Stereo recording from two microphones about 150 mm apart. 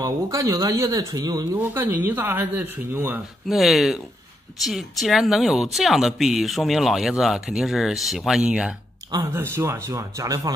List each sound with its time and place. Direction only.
0.0 s speech: 20° right (ahead or behind)
1.5 s speech: 15° right (ahead or behind)
3.4 s speech: centre (ahead or behind)
9.1 s speech: 20° right (ahead or behind)